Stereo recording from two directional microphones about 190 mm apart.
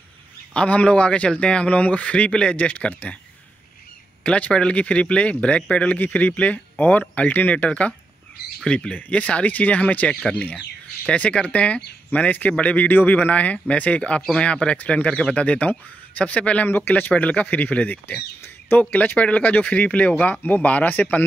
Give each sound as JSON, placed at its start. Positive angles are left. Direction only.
{"t": 0.5, "sound": "a man's voice", "side_deg": 5}
{"t": 4.2, "sound": "a man's voice", "side_deg": 5}